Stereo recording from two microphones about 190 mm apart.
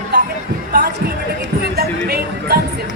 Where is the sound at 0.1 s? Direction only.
60° right (ahead or behind).